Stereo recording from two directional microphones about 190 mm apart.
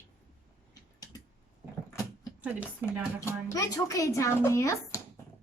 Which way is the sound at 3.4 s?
15° left (ahead or behind).